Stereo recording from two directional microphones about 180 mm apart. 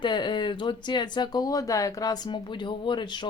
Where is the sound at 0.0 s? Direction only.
25° left (ahead or behind).